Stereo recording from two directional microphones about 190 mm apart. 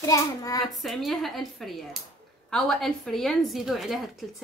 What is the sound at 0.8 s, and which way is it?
A woman's voice, centre (ahead or behind).